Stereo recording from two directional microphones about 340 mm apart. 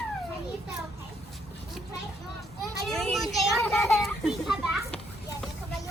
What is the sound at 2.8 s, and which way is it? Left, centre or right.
A child's voice, centre.